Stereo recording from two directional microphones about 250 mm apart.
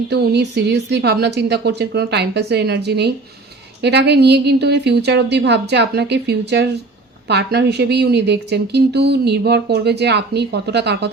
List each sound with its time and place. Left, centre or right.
0.1 s a woman's voice: right